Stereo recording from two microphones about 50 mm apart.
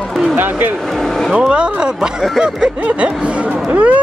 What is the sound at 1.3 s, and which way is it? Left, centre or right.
Speech, right.